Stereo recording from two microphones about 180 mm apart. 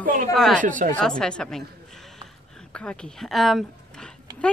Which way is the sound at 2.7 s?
5° left (ahead or behind).